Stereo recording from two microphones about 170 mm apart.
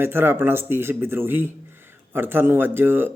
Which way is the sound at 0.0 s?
15° right (ahead or behind).